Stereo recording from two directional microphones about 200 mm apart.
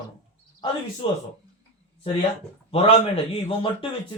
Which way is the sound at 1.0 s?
25° left (ahead or behind).